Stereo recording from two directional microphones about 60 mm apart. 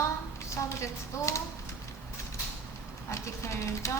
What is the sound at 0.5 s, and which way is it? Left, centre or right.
Speech, left.